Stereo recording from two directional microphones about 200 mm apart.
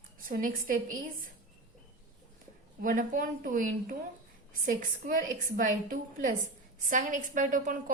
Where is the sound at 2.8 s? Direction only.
40° right (ahead or behind).